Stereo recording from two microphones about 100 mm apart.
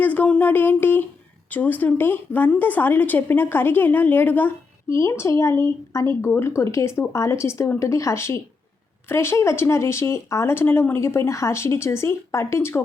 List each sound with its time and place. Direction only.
0.0 s a woman's voice: 15° left (ahead or behind)